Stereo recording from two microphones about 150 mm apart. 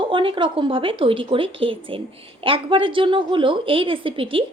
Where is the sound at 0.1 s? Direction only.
35° right (ahead or behind).